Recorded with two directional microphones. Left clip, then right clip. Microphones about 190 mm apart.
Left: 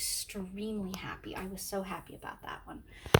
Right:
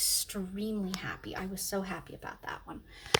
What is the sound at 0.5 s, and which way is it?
A woman's voice, 25° right (ahead or behind).